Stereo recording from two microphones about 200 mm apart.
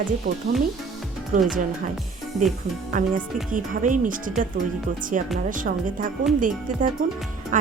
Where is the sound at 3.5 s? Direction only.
40° right (ahead or behind).